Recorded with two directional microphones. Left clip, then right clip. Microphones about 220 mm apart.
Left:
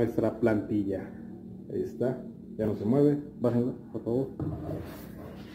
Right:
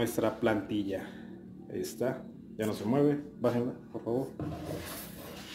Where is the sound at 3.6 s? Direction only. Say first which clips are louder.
Left 3 dB; 25° right (ahead or behind).